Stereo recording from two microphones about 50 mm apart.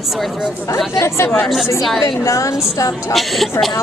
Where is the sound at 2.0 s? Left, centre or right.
Left.